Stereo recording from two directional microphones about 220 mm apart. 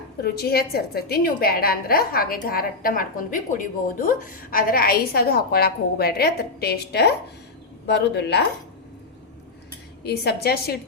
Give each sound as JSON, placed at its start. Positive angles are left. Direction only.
{"t": 0.2, "sound": "a woman's voice", "side_deg": 45}
{"t": 10.0, "sound": "a woman's voice", "side_deg": 45}